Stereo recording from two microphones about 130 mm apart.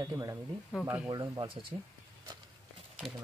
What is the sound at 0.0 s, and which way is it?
Speech, 25° right (ahead or behind).